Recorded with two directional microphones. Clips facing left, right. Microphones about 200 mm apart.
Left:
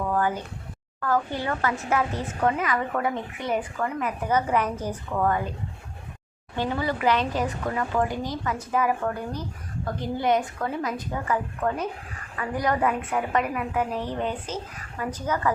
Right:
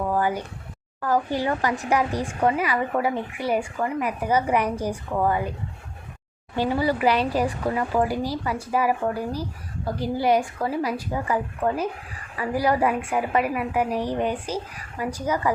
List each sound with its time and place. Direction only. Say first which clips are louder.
0.0 s a sound: right 2 dB; 10° right (ahead or behind)
1.3 s a woman's voice: right 3 dB; 15° right (ahead or behind)
6.6 s a woman's voice: right 4 dB; 10° right (ahead or behind)